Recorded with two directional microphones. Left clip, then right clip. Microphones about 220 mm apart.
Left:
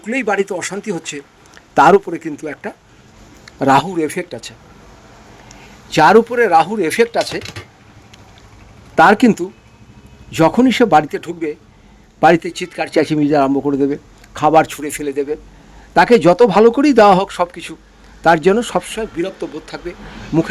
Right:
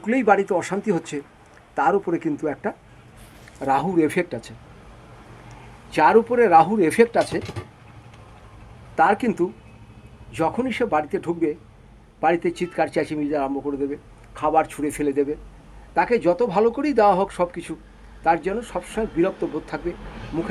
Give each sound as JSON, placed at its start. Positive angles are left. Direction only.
{"t": 0.0, "sound": "speech", "side_deg": 65}
{"t": 0.5, "sound": "speech", "side_deg": 0}
{"t": 0.9, "sound": "speech", "side_deg": 65}
{"t": 2.1, "sound": "speech", "side_deg": 40}
{"t": 3.6, "sound": "a man's voice", "side_deg": 45}
{"t": 9.0, "sound": "a man's voice", "side_deg": 45}
{"t": 10.3, "sound": "a man's voice", "side_deg": 60}